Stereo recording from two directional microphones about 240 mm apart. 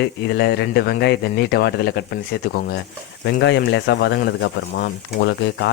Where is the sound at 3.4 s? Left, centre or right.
Left.